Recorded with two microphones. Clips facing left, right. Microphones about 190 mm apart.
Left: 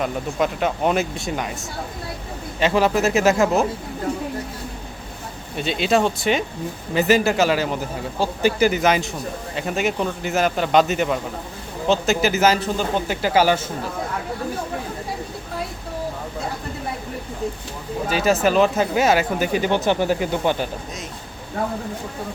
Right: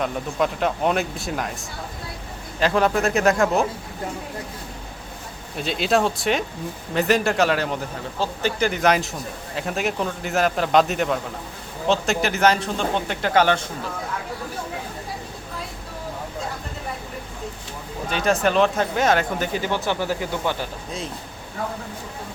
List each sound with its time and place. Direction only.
0.0 s speech: centre (ahead or behind)
2.6 s speech: centre (ahead or behind)
5.5 s speech: centre (ahead or behind)
18.1 s speech: 5° left (ahead or behind)